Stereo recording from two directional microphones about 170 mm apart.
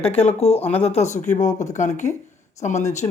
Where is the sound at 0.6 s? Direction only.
10° left (ahead or behind).